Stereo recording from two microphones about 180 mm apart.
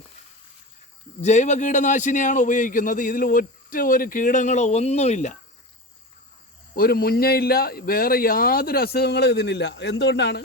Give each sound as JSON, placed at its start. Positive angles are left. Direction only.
{"t": 1.2, "sound": "a man's voice", "side_deg": 40}
{"t": 6.7, "sound": "a man's voice", "side_deg": 55}